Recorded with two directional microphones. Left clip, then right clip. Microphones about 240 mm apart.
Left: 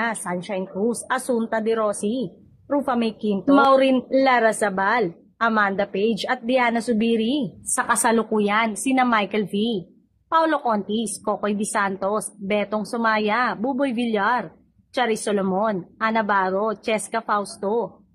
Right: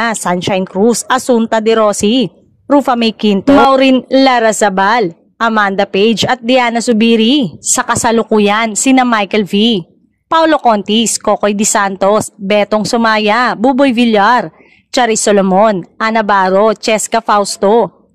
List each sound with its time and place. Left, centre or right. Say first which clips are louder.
0.0 s speech: right 12 dB; right